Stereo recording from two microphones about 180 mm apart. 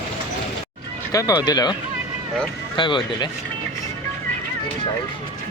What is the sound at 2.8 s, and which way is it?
Speech, 25° left (ahead or behind).